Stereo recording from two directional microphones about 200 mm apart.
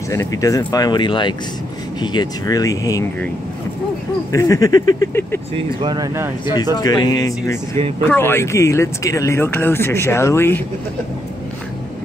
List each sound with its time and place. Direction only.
0.1 s speech: 15° left (ahead or behind)
4.3 s speech: 15° left (ahead or behind)
5.8 s speech: 20° right (ahead or behind)
6.4 s speech: 20° left (ahead or behind)